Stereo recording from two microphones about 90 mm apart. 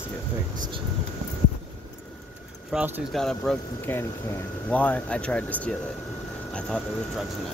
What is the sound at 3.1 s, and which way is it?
Speech, 5° left (ahead or behind).